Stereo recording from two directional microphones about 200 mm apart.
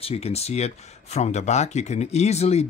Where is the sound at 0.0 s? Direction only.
30° left (ahead or behind).